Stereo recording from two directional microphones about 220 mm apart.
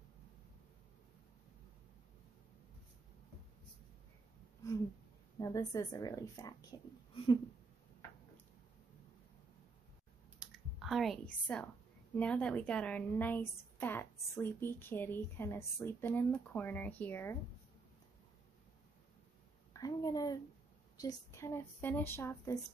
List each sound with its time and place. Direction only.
5.4 s a woman's voice: 15° left (ahead or behind)
10.4 s computer keyboard: centre (ahead or behind)
12.1 s a woman's voice: 5° left (ahead or behind)
19.7 s a woman's voice: 15° left (ahead or behind)